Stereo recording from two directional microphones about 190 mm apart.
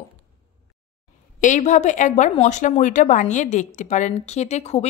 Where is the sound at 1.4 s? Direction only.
40° left (ahead or behind).